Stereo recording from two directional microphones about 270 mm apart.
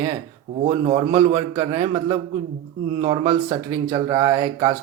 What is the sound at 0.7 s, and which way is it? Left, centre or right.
Speech, centre.